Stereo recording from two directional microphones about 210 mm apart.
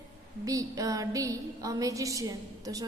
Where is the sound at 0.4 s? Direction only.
15° right (ahead or behind).